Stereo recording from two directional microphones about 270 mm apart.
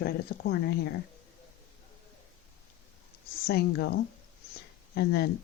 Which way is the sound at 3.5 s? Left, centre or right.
Left.